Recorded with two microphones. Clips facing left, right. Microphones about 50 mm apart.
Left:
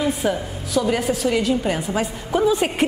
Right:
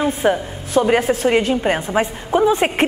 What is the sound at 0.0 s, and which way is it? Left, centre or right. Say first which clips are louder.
A woman's voice: right 4 dB; right.